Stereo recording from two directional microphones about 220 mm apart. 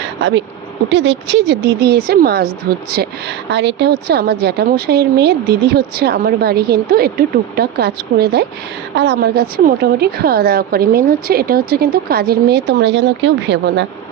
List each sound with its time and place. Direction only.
0.2 s a woman's voice: 55° right (ahead or behind)